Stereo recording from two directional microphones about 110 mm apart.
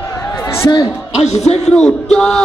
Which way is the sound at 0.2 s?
25° left (ahead or behind).